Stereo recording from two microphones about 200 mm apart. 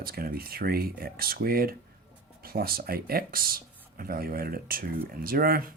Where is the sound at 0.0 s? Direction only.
50° right (ahead or behind).